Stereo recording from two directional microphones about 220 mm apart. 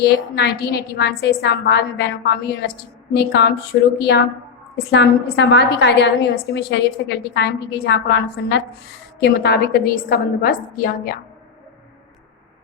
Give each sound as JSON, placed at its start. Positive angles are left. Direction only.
{"t": 0.3, "sound": "a woman's voice", "side_deg": 45}